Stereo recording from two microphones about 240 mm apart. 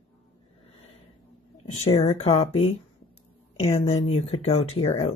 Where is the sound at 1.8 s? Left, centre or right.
Left.